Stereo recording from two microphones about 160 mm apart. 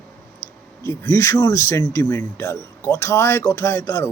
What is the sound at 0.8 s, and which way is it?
Speech, 20° left (ahead or behind).